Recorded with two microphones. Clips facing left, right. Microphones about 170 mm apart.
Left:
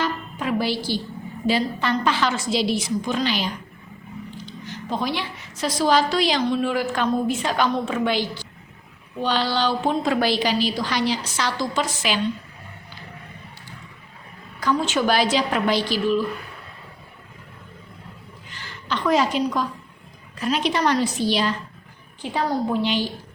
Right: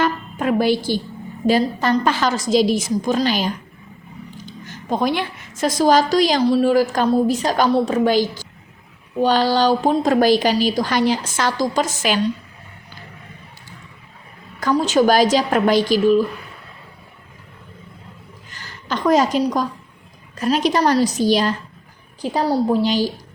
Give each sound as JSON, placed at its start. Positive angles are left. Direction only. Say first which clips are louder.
{"t": 0.0, "sound": "music", "louder": "right 6 dB", "side_deg": -50}
{"t": 1.5, "sound": "a woman's voice", "louder": "right 5 dB", "side_deg": -45}
{"t": 14.6, "sound": "a woman's voice", "louder": "right 6 dB", "side_deg": -40}
{"t": 18.5, "sound": "a woman's voice", "louder": "right 2 dB", "side_deg": -45}